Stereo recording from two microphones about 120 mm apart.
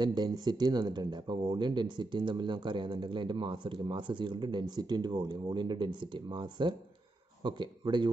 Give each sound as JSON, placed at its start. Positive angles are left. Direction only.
{"t": 0.0, "sound": "speech", "side_deg": -35}